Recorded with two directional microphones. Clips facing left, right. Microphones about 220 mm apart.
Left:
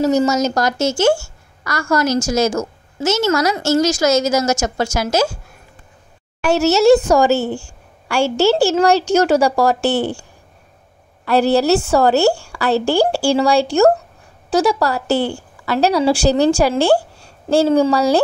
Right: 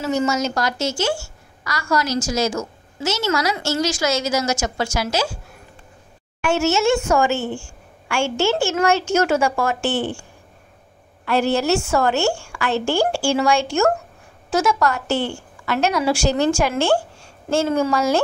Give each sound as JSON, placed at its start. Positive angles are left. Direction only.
{"t": 0.0, "sound": "a woman's voice", "side_deg": 40}
{"t": 6.4, "sound": "a woman's voice", "side_deg": 35}
{"t": 11.2, "sound": "a woman's voice", "side_deg": 35}